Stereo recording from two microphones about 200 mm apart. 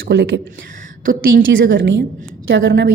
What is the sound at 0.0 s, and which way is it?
Speech, 60° right (ahead or behind).